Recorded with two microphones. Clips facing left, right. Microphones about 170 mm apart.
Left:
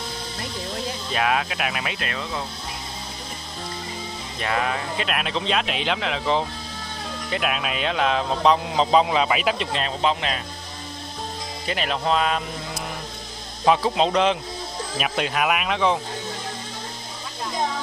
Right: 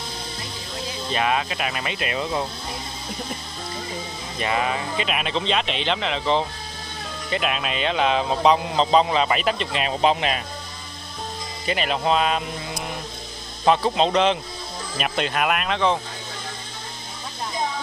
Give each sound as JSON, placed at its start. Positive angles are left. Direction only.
{"t": 1.1, "sound": "speech", "side_deg": 0}
{"t": 2.0, "sound": "speech", "side_deg": -20}
{"t": 4.4, "sound": "speech", "side_deg": -5}
{"t": 9.8, "sound": "speech", "side_deg": -15}
{"t": 11.6, "sound": "speech", "side_deg": 0}